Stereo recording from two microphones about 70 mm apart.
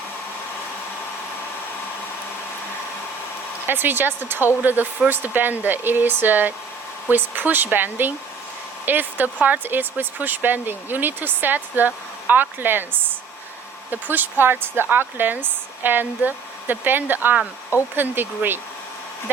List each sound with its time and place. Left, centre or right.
3.7 s speech: right